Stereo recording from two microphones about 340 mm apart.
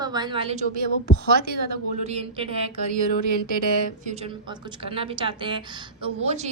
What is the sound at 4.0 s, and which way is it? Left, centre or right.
A woman's voice, centre.